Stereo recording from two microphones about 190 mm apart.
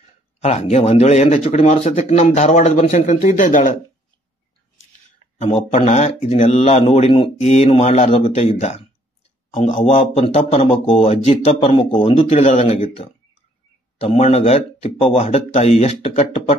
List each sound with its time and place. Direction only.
0.4 s speech: 35° left (ahead or behind)
5.4 s speech: 35° left (ahead or behind)